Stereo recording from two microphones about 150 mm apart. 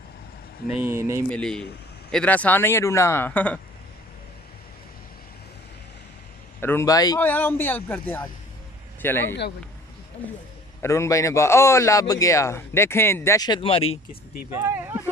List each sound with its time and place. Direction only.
0.8 s speech: 20° right (ahead or behind)
1.3 s speech: 5° left (ahead or behind)
6.6 s a man's voice: 15° left (ahead or behind)
7.2 s speech: 10° left (ahead or behind)
10.8 s a man's voice: 20° left (ahead or behind)
13.6 s speech: 40° left (ahead or behind)
14.5 s a sound: 15° right (ahead or behind)